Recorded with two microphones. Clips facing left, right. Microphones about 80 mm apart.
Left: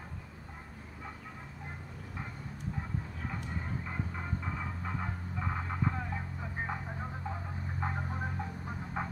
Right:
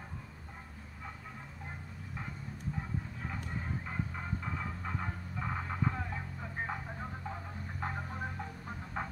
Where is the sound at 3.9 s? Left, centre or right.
Centre.